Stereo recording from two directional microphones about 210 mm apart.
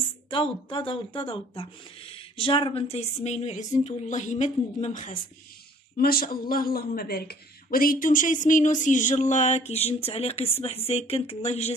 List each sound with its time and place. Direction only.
0.3 s speech: 25° left (ahead or behind)